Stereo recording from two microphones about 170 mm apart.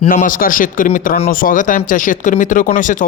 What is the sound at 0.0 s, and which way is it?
Speech, 50° left (ahead or behind).